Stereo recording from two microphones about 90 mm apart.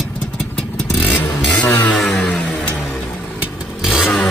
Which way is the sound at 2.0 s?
5° left (ahead or behind).